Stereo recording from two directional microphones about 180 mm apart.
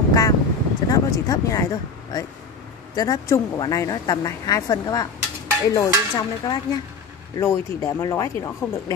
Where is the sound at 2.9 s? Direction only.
20° left (ahead or behind).